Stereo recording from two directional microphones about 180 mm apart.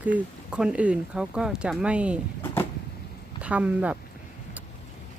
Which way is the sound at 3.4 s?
5° right (ahead or behind).